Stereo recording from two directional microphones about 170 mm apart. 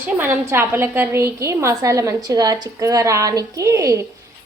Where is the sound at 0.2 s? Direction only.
10° right (ahead or behind).